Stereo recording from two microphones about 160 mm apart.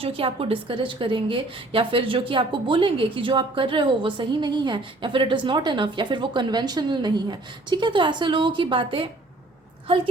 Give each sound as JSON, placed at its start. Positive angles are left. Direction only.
{"t": 0.0, "sound": "a woman's voice", "side_deg": -35}